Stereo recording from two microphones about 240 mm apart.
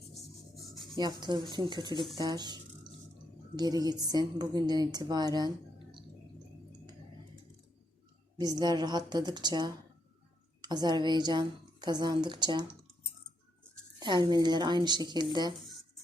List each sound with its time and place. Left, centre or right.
0.1 s rub: centre
0.9 s a woman's voice: centre
2.1 s drip: centre
3.5 s a woman's voice: centre
8.4 s a woman's voice: centre
14.0 s a woman's voice: centre